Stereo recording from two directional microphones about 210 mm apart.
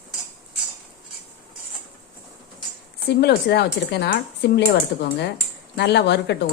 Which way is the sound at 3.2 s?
50° left (ahead or behind).